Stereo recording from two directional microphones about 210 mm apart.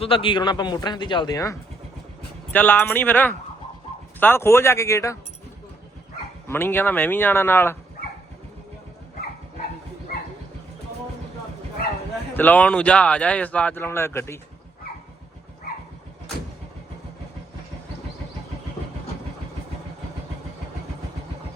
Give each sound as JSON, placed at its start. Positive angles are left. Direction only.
{"t": 0.0, "sound": "speech", "side_deg": 25}
{"t": 6.5, "sound": "speech", "side_deg": 10}
{"t": 12.3, "sound": "speech", "side_deg": 10}